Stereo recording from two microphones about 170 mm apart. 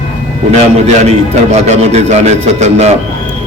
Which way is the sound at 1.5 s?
40° right (ahead or behind).